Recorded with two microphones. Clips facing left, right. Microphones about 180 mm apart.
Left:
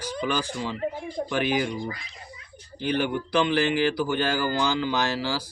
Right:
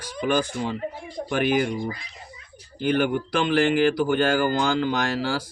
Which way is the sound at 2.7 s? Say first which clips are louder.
Right 4 dB; 50° right (ahead or behind).